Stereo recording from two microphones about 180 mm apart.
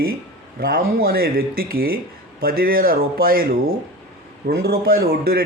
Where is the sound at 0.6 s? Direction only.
55° right (ahead or behind).